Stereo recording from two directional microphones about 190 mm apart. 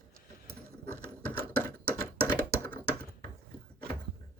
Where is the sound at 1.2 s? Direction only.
10° left (ahead or behind).